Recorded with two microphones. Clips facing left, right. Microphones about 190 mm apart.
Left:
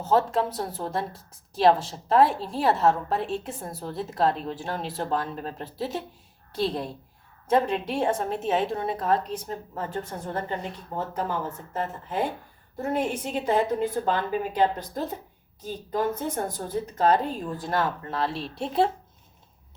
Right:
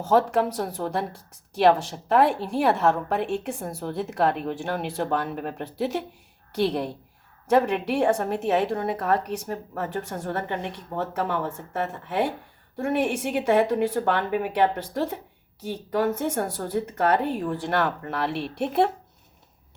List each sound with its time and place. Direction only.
0.1 s speech: 70° right (ahead or behind)